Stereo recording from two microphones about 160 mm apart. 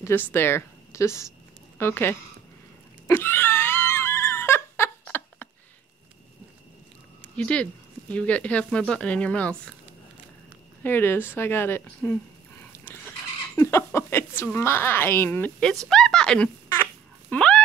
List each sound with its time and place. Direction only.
0.0 s a woman's voice: 15° left (ahead or behind)
3.1 s a sound: 15° left (ahead or behind)
7.3 s a woman's voice: 5° left (ahead or behind)
10.8 s speech: 15° left (ahead or behind)
17.3 s dog: 5° left (ahead or behind)